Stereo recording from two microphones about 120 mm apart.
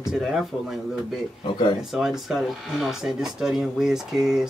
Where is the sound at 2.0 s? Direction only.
5° right (ahead or behind).